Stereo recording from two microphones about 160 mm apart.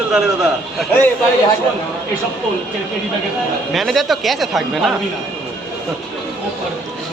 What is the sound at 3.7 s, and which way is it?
Speech, centre (ahead or behind).